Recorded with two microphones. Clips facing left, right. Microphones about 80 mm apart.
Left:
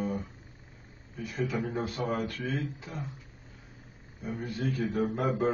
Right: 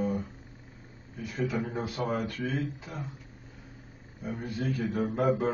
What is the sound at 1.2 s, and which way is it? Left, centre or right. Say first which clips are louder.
Speech: right 1 dB; centre.